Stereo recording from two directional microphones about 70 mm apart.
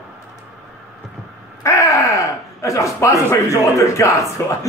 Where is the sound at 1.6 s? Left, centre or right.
Left.